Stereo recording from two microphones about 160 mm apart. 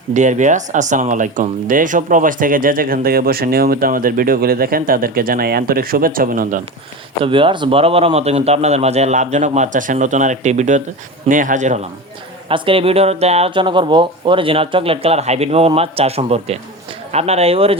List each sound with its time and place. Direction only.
0.1 s speech: 50° right (ahead or behind)
7.3 s a man's voice: 30° right (ahead or behind); by 11.9 s 50° right (ahead or behind)
12.5 s speech: 35° right (ahead or behind)